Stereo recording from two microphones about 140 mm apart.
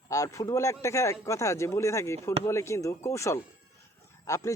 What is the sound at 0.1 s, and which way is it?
A man's voice, 25° left (ahead or behind).